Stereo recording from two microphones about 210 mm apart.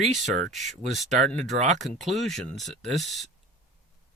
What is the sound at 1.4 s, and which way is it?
Speech, 35° right (ahead or behind).